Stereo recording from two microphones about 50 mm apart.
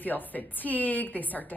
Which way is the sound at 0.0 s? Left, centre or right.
Left.